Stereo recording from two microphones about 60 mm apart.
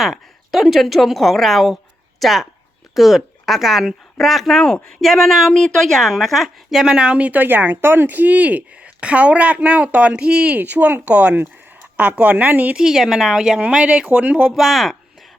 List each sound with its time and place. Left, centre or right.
0.0 s speech: centre
1.7 s a sound: centre
2.9 s speech: centre
10.6 s speech: right
12.7 s speech: centre; by 14.4 s right
14.4 s speech: centre